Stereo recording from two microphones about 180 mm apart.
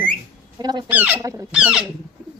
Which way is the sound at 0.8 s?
10° right (ahead or behind).